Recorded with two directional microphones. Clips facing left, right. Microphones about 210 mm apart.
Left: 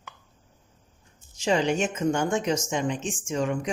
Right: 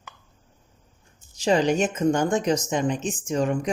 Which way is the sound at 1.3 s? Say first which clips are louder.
Right 3 dB; 35° right (ahead or behind).